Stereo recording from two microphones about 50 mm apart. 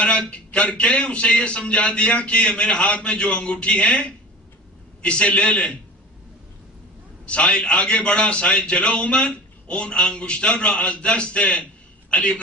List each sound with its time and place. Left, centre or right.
0.3 s a man's voice: left
7.2 s a man's voice: left